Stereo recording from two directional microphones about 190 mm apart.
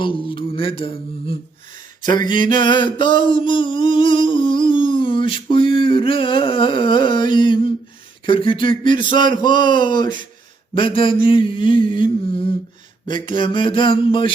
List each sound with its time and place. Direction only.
0.0 s speech: 25° left (ahead or behind)
2.0 s a sound: 20° left (ahead or behind)
8.3 s speech: 25° left (ahead or behind)